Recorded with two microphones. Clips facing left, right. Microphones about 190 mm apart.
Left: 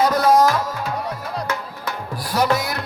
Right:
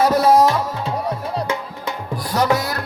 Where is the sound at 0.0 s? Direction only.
5° right (ahead or behind).